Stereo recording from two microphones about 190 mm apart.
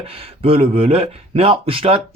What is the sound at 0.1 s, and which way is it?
Speech, 30° right (ahead or behind).